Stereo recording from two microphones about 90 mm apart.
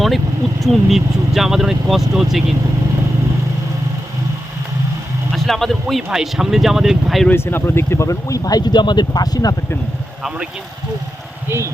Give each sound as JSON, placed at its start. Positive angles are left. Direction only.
{"t": 0.6, "sound": "speech", "side_deg": 0}
{"t": 5.3, "sound": "a sound", "side_deg": 0}
{"t": 6.1, "sound": "speech", "side_deg": -5}
{"t": 7.3, "sound": "speech", "side_deg": 25}
{"t": 10.2, "sound": "speech", "side_deg": -10}
{"t": 11.4, "sound": "speech", "side_deg": -30}